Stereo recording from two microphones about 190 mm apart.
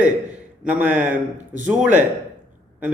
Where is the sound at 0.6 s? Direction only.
10° right (ahead or behind).